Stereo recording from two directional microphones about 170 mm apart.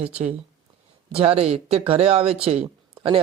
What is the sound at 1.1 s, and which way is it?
Speech, 35° right (ahead or behind).